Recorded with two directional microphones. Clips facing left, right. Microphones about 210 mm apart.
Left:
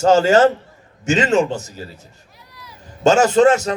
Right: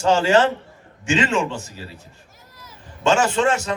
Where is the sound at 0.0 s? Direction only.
40° left (ahead or behind).